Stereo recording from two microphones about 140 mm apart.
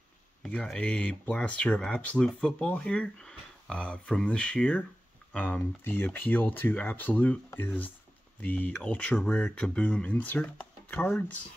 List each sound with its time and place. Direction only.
0.4 s speech: 5° left (ahead or behind)